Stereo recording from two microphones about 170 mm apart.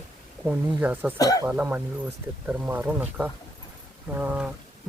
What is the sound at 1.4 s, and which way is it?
Speech, 10° right (ahead or behind).